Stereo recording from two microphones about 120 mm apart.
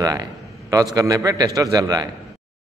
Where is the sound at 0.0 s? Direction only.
30° right (ahead or behind).